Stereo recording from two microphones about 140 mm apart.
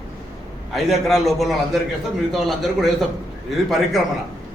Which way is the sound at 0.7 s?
Centre (ahead or behind).